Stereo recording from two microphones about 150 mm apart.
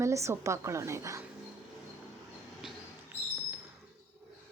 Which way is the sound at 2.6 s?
5° right (ahead or behind).